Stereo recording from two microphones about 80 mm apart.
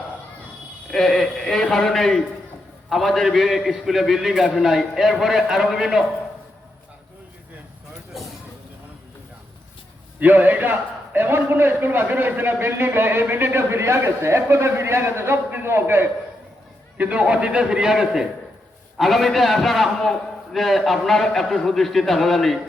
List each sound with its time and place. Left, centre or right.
0.9 s a man's voice: centre
8.1 s a sound: centre
10.2 s a man's voice: right
17.0 s a man's voice: centre